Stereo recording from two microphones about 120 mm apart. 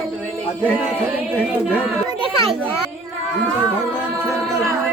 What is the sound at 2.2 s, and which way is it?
Children playing, 50° right (ahead or behind).